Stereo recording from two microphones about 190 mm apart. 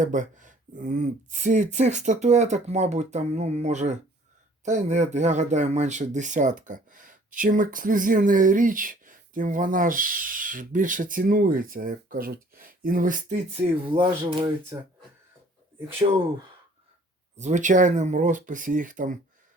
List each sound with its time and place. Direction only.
0.0 s speech: 40° right (ahead or behind)
13.8 s speech: 25° right (ahead or behind)
17.3 s speech: 40° right (ahead or behind)